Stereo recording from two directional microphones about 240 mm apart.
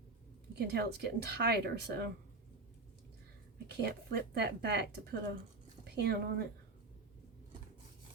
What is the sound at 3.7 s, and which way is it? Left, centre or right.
Speech, right.